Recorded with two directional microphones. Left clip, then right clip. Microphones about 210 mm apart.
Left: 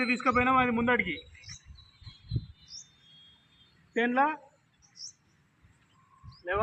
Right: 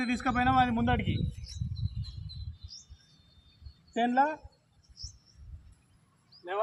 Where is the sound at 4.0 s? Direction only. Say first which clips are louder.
Even; 35° right (ahead or behind).